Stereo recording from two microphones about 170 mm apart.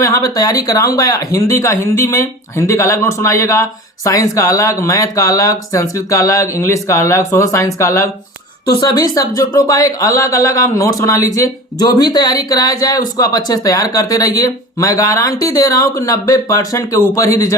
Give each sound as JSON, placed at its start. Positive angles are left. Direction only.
{"t": 0.0, "sound": "speech", "side_deg": 20}